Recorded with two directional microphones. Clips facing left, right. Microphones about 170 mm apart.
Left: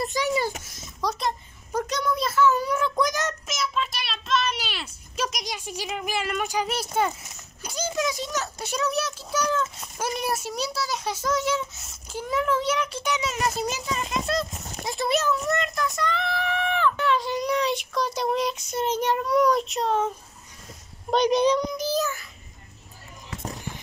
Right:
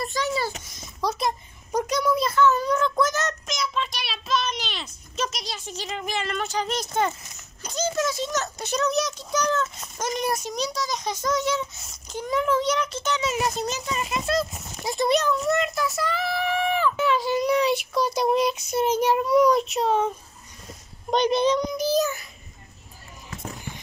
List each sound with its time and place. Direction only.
0.0 s a sound: 15° left (ahead or behind)
1.2 s a child's voice: 15° right (ahead or behind); by 13.9 s 10° left (ahead or behind)
13.9 s a child's voice: 5° right (ahead or behind)
21.1 s a child's voice: 10° left (ahead or behind)
21.7 s child singing: 15° right (ahead or behind)